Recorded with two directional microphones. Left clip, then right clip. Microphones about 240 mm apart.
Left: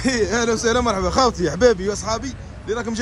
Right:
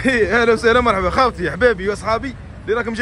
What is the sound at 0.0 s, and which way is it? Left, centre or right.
Speech, centre.